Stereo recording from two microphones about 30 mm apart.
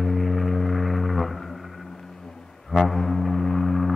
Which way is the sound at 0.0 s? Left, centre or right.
Centre.